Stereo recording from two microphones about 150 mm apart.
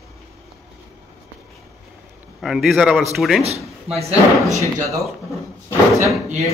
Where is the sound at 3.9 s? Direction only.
45° right (ahead or behind).